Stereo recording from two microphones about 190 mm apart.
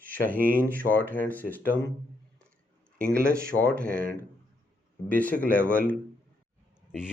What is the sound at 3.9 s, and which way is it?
Speech, 50° right (ahead or behind).